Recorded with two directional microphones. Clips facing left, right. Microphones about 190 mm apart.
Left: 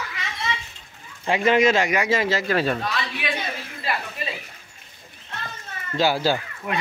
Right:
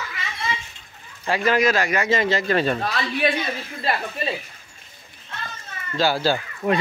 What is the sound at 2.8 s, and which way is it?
Speech, 35° right (ahead or behind).